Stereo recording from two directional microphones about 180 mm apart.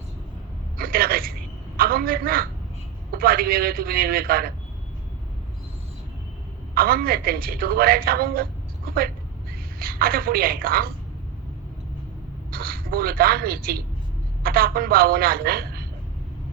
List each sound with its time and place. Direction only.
0.8 s a sound: 55° right (ahead or behind)
1.7 s a woman's voice: 55° right (ahead or behind)
6.7 s a woman's voice: 55° right (ahead or behind)
9.7 s a woman's voice: 55° right (ahead or behind)
12.5 s a woman's voice: 55° right (ahead or behind)